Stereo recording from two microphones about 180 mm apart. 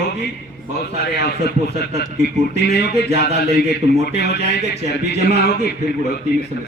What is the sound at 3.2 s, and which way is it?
Speech, 65° left (ahead or behind).